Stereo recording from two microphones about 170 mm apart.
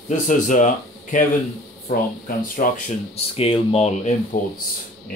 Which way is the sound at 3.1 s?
35° left (ahead or behind).